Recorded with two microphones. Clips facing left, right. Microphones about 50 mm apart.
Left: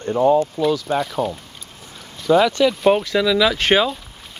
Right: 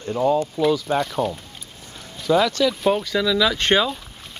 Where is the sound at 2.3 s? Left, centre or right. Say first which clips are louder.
Left 3 dB; centre.